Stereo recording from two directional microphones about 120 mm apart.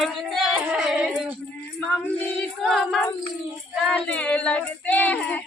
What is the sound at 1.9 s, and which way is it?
Female singing, 15° left (ahead or behind).